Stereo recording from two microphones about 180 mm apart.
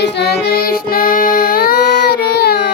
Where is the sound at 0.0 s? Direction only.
65° left (ahead or behind).